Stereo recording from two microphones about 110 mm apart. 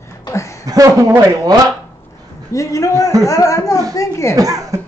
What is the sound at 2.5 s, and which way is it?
Speech, 30° left (ahead or behind).